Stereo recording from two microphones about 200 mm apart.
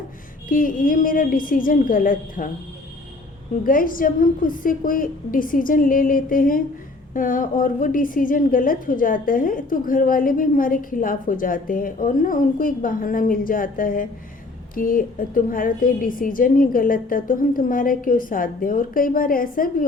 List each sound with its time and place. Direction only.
0.4 s a woman's voice: 45° left (ahead or behind)
3.6 s a woman's voice: 45° left (ahead or behind)